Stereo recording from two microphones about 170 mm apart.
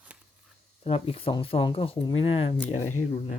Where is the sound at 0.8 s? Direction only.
35° left (ahead or behind).